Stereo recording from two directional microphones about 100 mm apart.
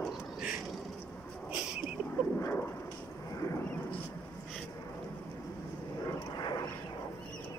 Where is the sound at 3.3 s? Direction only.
30° left (ahead or behind).